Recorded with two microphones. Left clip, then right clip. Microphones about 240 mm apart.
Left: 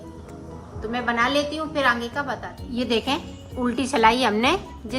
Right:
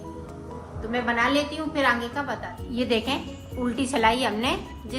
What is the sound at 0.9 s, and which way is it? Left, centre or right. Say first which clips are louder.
A woman's voice: left 1 dB; left.